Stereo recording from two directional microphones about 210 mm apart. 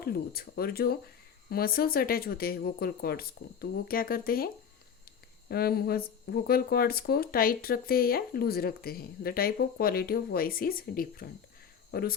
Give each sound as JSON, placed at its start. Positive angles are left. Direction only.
{"t": 0.0, "sound": "speech", "side_deg": 50}